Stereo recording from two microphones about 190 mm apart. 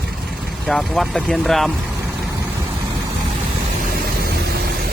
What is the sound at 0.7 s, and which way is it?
Speech, centre (ahead or behind).